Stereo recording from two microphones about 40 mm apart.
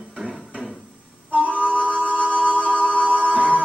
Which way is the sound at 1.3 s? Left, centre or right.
Left.